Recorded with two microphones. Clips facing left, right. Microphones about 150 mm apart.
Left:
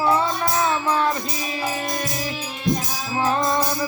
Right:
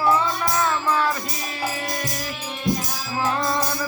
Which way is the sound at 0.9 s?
25° left (ahead or behind).